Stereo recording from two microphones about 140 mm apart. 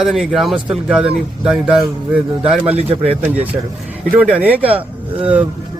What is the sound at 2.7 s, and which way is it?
Speech, 45° right (ahead or behind).